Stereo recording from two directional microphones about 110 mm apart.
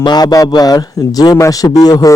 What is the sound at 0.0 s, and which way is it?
A man's voice, 40° left (ahead or behind).